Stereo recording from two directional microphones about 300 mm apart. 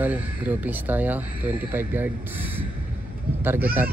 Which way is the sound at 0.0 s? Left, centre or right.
Centre.